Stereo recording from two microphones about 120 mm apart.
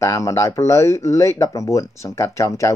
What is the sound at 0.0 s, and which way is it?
Speech, 25° left (ahead or behind).